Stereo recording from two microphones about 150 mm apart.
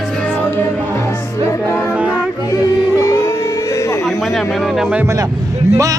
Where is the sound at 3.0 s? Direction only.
20° left (ahead or behind).